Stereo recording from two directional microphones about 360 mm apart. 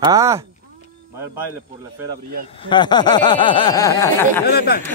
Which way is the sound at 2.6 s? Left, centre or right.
Centre.